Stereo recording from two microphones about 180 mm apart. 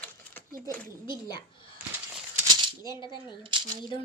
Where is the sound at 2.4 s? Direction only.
25° right (ahead or behind).